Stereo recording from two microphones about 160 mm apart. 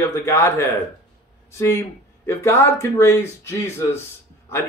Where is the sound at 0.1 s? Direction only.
15° left (ahead or behind).